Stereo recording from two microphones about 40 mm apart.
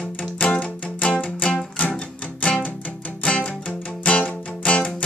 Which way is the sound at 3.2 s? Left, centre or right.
Left.